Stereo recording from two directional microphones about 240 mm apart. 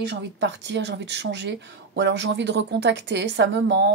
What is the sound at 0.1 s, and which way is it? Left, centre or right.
Speech, right.